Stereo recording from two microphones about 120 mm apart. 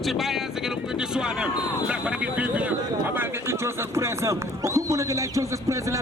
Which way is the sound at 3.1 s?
20° right (ahead or behind).